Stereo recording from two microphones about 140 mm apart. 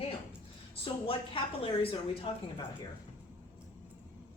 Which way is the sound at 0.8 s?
40° left (ahead or behind).